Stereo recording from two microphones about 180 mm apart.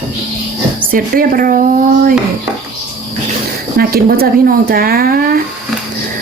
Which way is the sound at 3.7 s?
55° right (ahead or behind).